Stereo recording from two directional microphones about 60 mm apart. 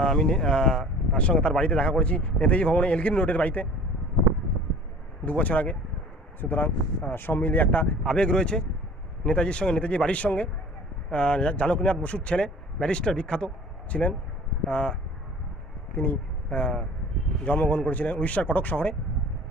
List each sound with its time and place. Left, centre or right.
0.0 s speech: centre
5.2 s speech: left
8.0 s a man's voice: centre
13.9 s speech: centre
14.7 s speech: centre
16.4 s speech: left